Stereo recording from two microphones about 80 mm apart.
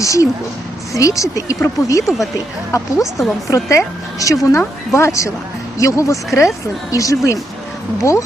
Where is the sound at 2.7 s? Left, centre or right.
Left.